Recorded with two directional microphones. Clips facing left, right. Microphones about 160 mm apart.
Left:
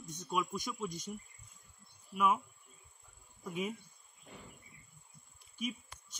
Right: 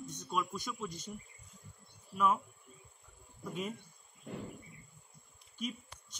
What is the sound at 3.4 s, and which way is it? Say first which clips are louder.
Speech: left 1 dB; 10° left (ahead or behind).